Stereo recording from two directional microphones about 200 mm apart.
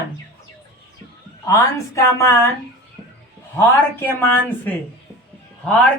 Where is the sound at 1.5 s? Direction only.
15° left (ahead or behind).